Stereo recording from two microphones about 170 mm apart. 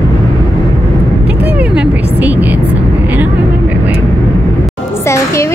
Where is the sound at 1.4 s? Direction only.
10° right (ahead or behind).